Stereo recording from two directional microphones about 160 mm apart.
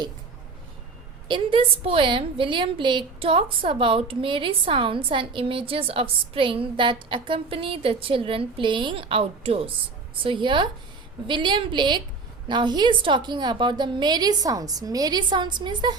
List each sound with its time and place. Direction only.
1.3 s a woman's voice: 35° right (ahead or behind)